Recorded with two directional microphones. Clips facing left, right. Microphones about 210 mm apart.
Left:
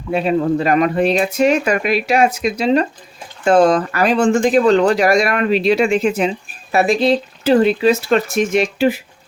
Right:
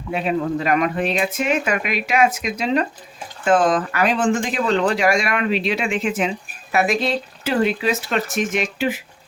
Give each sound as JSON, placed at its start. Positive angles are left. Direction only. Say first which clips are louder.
{"t": 0.1, "sound": "speech", "louder": "left 5 dB", "side_deg": 35}